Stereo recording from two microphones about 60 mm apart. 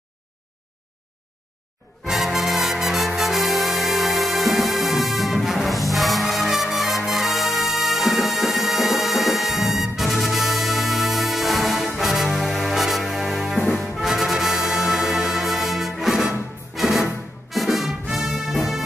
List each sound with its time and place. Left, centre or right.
2.0 s music: centre